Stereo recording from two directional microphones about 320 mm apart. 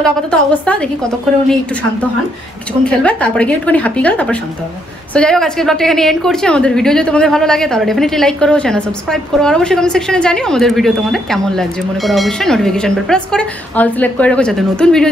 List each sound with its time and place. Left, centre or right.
0.0 s a woman's voice: centre
2.8 s a woman's voice: centre